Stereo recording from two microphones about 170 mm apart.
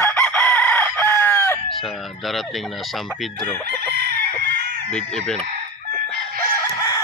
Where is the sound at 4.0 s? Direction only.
70° right (ahead or behind).